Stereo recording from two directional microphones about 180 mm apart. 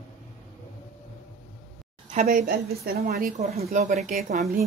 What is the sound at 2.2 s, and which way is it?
A woman's voice, 55° right (ahead or behind).